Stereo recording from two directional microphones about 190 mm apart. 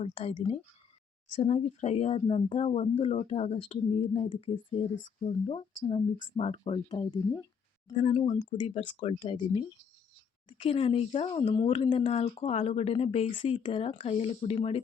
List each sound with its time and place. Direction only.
0.0 s speech: 30° left (ahead or behind)